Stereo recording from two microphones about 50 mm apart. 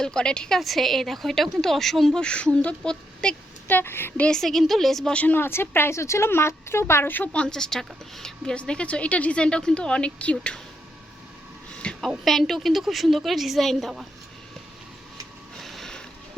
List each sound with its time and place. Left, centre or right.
0.0 s a woman's voice: centre
0.6 s a woman's voice: centre
2.1 s a woman's voice: left
3.7 s speech: left
4.3 s a woman's voice: centre
5.1 s speech: left
5.4 s speech: left
6.0 s speech: left
7.3 s a woman's voice: centre
8.5 s a woman's voice: left
11.9 s a woman's voice: centre
15.5 s a sound: centre